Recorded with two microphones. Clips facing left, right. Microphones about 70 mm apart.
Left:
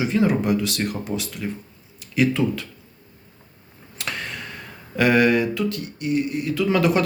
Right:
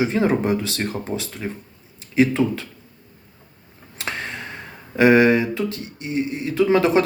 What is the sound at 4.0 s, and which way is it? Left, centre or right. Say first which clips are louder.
Speech: right 2 dB; right.